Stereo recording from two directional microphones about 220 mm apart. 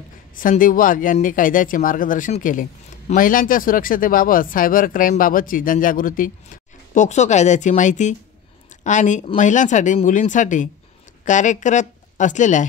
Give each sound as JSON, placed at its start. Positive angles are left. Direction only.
{"t": 0.4, "sound": "speech", "side_deg": 40}